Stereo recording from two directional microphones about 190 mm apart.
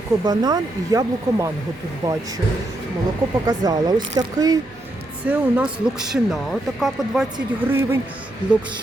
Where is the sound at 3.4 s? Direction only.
20° right (ahead or behind).